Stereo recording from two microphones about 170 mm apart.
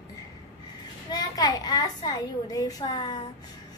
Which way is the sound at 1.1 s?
20° left (ahead or behind).